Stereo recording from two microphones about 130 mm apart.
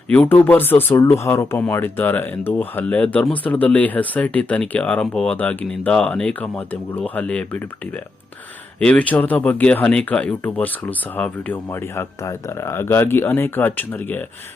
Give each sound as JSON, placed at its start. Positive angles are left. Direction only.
{"t": 0.1, "sound": "speech", "side_deg": 10}